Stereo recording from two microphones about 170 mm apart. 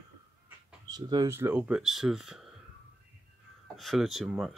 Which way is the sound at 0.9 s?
25° right (ahead or behind).